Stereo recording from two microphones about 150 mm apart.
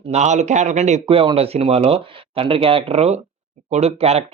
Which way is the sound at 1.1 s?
35° right (ahead or behind).